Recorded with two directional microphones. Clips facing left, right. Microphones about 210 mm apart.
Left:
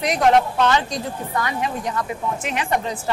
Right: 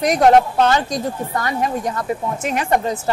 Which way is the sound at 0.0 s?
45° right (ahead or behind).